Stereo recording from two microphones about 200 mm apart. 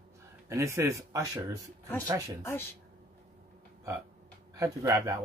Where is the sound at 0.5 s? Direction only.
15° right (ahead or behind).